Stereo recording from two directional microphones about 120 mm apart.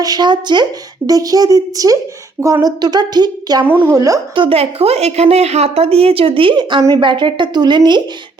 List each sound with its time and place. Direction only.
0.0 s a woman's voice: 35° right (ahead or behind)
4.4 s a woman's voice: 55° right (ahead or behind)